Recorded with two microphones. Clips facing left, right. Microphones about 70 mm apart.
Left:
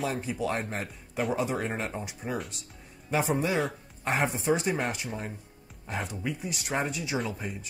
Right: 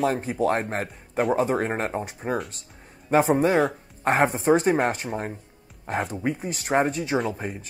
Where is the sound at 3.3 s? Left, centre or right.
Right.